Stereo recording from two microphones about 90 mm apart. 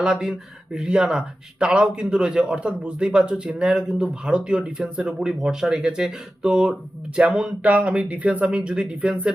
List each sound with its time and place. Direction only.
0.0 s speech: 5° right (ahead or behind)